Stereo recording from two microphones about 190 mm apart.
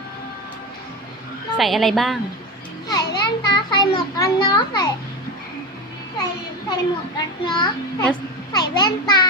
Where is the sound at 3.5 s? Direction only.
20° left (ahead or behind).